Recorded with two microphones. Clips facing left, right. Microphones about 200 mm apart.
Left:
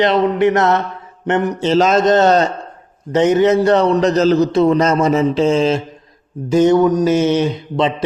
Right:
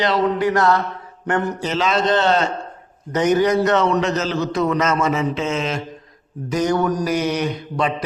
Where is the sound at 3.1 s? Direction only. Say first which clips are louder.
Left 4 dB; 25° left (ahead or behind).